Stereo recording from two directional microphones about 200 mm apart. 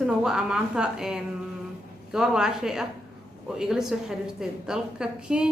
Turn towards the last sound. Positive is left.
turn(degrees=-5)  # may be behind; listen again after turning